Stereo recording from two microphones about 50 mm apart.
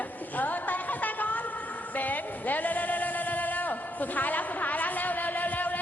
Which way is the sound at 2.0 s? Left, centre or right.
Left.